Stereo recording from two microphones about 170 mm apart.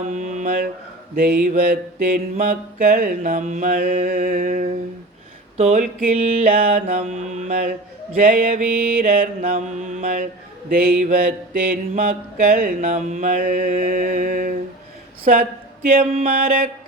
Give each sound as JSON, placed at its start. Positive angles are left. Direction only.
{"t": 0.1, "sound": "mantra", "side_deg": -45}
{"t": 5.5, "sound": "a sound", "side_deg": -40}
{"t": 6.4, "sound": "mantra", "side_deg": -60}
{"t": 7.1, "sound": "mantra", "side_deg": -45}
{"t": 9.4, "sound": "mantra", "side_deg": -40}